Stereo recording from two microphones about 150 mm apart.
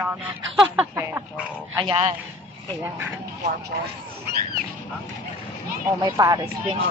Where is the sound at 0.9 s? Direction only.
15° right (ahead or behind).